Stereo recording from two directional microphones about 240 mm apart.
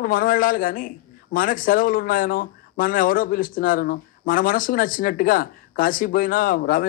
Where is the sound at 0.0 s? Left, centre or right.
Left.